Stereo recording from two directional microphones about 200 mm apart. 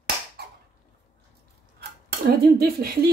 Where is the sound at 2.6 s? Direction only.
50° right (ahead or behind).